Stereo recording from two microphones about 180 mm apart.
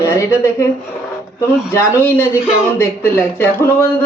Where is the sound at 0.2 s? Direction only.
15° left (ahead or behind).